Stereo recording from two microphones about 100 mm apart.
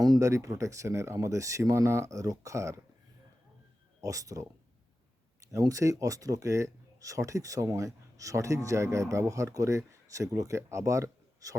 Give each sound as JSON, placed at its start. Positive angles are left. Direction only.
{"t": 0.0, "sound": "speech", "side_deg": -35}
{"t": 4.0, "sound": "speech", "side_deg": -35}